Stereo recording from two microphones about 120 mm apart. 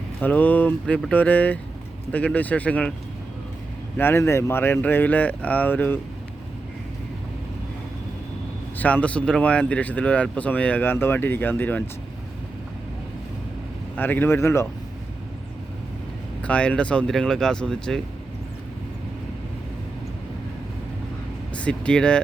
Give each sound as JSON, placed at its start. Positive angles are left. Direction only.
{"t": 0.2, "sound": "speech", "side_deg": 15}
{"t": 3.9, "sound": "speech", "side_deg": 20}
{"t": 8.8, "sound": "speech", "side_deg": 10}
{"t": 13.9, "sound": "speech", "side_deg": 15}
{"t": 16.4, "sound": "speech", "side_deg": 10}
{"t": 21.5, "sound": "speech", "side_deg": 10}